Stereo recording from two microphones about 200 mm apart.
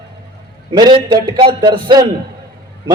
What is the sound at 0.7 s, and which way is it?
A man's voice, 20° right (ahead or behind).